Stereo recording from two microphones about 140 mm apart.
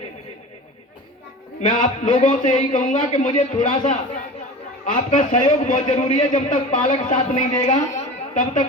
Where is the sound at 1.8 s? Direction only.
65° left (ahead or behind).